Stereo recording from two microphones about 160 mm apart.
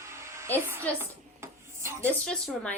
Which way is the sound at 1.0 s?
15° right (ahead or behind).